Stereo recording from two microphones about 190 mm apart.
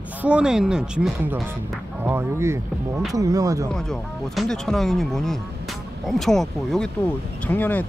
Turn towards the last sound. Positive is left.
turn(degrees=10)  # may be behind; listen again after turning